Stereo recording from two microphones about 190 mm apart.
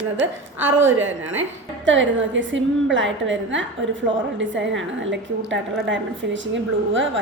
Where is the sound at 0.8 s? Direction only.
90° right.